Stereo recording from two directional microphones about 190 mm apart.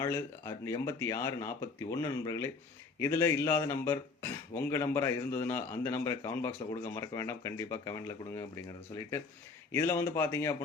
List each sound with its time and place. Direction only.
0.0 s speech: 15° left (ahead or behind)
9.7 s speech: 15° left (ahead or behind)